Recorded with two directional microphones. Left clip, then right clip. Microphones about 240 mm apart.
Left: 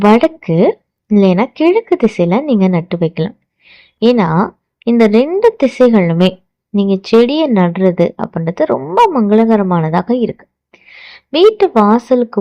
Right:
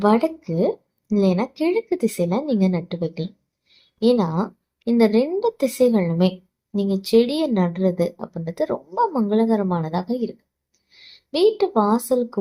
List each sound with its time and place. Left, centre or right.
0.0 s speech: left